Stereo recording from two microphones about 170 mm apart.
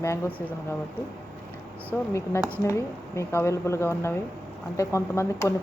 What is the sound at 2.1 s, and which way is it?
Speech, 15° left (ahead or behind).